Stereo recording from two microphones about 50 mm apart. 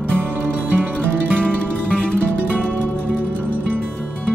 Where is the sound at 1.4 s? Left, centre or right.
Centre.